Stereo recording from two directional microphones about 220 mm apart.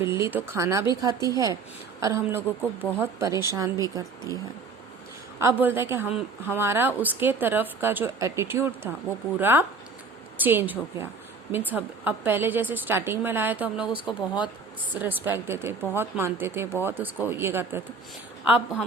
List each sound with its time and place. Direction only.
0.0 s a woman's voice: 10° right (ahead or behind)